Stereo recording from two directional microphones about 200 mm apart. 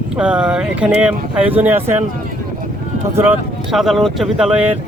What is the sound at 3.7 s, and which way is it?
Speech, centre (ahead or behind).